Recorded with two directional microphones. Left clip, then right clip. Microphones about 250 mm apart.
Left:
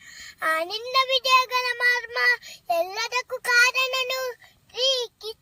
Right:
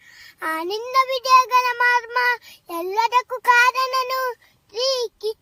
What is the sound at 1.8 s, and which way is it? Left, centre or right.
Child singing, centre.